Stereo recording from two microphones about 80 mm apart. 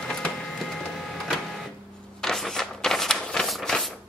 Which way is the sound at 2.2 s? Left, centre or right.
Centre.